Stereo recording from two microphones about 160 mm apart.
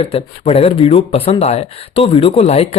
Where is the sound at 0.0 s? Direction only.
40° left (ahead or behind).